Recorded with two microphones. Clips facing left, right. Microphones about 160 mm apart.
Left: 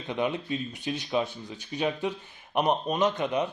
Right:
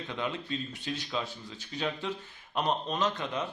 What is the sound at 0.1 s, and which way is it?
Speech, 15° left (ahead or behind).